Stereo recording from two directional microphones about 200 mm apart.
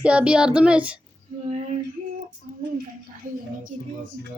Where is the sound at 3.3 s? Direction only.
40° right (ahead or behind).